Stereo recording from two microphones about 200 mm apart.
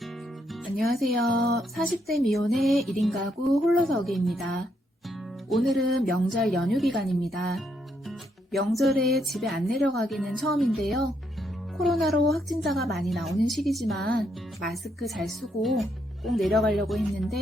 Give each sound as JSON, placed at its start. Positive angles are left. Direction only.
{"t": 0.8, "sound": "speech", "side_deg": 0}
{"t": 9.0, "sound": "a sound", "side_deg": -50}
{"t": 9.2, "sound": "speech", "side_deg": 0}